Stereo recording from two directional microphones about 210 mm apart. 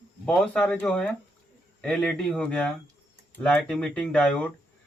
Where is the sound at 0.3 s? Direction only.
5° left (ahead or behind).